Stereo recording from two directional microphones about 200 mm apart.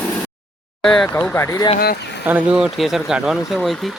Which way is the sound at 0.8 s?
5° left (ahead or behind).